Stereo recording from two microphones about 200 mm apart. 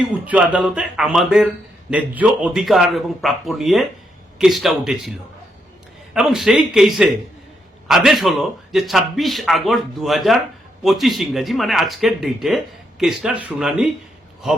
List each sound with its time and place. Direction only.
0.3 s a man's voice: 5° right (ahead or behind)
6.1 s a man's voice: centre (ahead or behind)